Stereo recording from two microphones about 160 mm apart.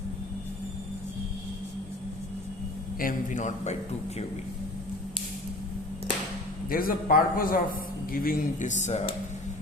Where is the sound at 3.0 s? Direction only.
50° left (ahead or behind).